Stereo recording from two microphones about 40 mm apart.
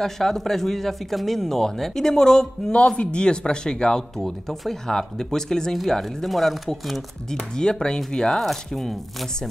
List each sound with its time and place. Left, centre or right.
0.0 s speech: centre
3.0 s speech: left
4.2 s speech: centre
7.2 s speech: centre
8.4 s speech: centre